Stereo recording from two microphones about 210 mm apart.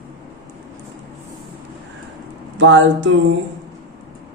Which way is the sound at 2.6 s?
60° right (ahead or behind).